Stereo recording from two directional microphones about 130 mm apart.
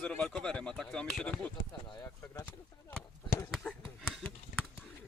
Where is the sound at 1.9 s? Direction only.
25° left (ahead or behind).